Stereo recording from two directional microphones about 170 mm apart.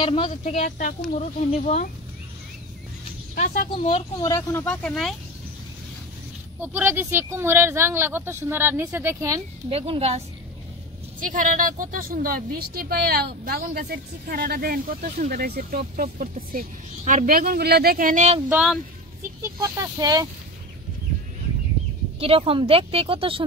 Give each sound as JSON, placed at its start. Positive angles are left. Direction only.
{"t": 0.0, "sound": "speech", "side_deg": 30}
{"t": 0.4, "sound": "speech", "side_deg": 50}
{"t": 3.3, "sound": "speech", "side_deg": 50}
{"t": 3.7, "sound": "speech", "side_deg": 35}
{"t": 4.2, "sound": "speech", "side_deg": 20}
{"t": 6.6, "sound": "speech", "side_deg": -10}
{"t": 9.7, "sound": "speech", "side_deg": -35}
{"t": 11.1, "sound": "a woman's voice", "side_deg": -50}
{"t": 19.4, "sound": "speech", "side_deg": -20}
{"t": 22.2, "sound": "speech", "side_deg": -35}